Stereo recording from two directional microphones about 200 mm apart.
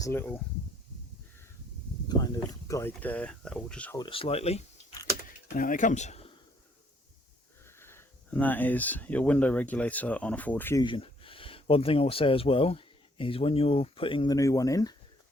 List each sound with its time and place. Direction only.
0.0 s speech: 10° left (ahead or behind)
2.0 s a sound: 20° left (ahead or behind)
2.5 s speech: 15° left (ahead or behind)
3.9 s speech: 25° left (ahead or behind)
5.5 s speech: 40° left (ahead or behind)
7.8 s speech: 10° left (ahead or behind)
10.8 s speech: 25° left (ahead or behind)